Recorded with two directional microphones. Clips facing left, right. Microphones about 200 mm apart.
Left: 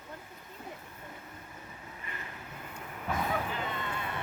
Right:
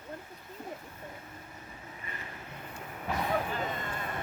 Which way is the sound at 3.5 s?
45° right (ahead or behind).